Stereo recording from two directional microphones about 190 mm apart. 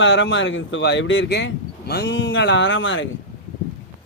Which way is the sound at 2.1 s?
90° left.